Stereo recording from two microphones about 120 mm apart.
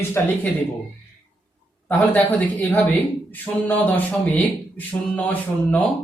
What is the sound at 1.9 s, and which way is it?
Speech, 15° left (ahead or behind).